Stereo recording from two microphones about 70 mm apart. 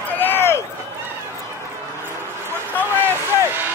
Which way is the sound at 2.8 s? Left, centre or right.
Right.